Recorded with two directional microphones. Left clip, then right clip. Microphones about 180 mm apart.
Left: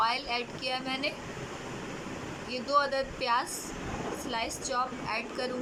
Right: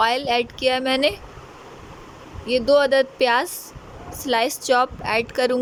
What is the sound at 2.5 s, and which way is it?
A woman's voice, 55° right (ahead or behind).